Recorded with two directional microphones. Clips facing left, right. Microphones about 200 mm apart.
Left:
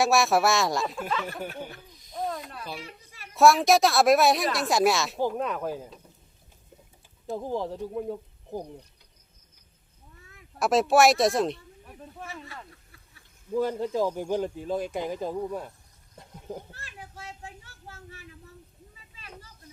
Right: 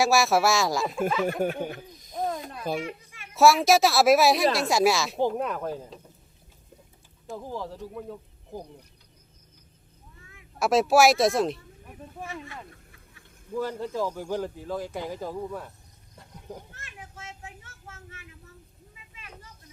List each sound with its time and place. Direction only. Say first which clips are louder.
0.0 s a woman's voice: even; centre (ahead or behind)
1.4 s a sound: right 8 dB; 50° right (ahead or behind)
1.9 s owl: right 5 dB; 45° right (ahead or behind)
2.3 s a sound: right 2 dB; 20° right (ahead or behind)
3.3 s a woman's voice: even; centre (ahead or behind)
5.5 s a woman's voice: even; 5° left (ahead or behind)
7.3 s speech: left 5 dB; 20° left (ahead or behind)
10.6 s a woman's voice: right 1 dB; centre (ahead or behind)
13.6 s a man's voice: left 3 dB; 20° left (ahead or behind)
16.1 s goat: left 3 dB; 15° left (ahead or behind)
16.7 s a sound: left 1 dB; 35° left (ahead or behind)